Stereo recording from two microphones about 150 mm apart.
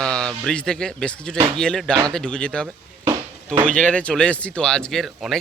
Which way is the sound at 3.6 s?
5° left (ahead or behind).